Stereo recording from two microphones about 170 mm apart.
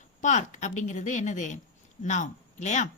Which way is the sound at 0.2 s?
45° left (ahead or behind).